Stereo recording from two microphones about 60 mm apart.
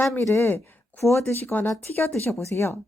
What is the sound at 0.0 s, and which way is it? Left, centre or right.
Speech, left.